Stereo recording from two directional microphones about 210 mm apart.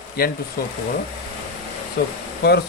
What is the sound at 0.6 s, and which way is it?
Speech, 45° left (ahead or behind).